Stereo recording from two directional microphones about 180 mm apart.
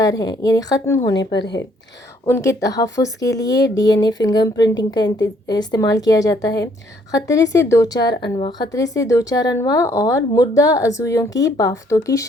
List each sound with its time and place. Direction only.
0.0 s speech: 20° left (ahead or behind)
1.1 s a woman's voice: 75° left (ahead or behind)
2.2 s speech: 15° left (ahead or behind)